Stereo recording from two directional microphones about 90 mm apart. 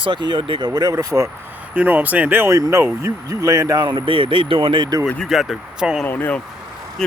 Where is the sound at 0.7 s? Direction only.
45° right (ahead or behind).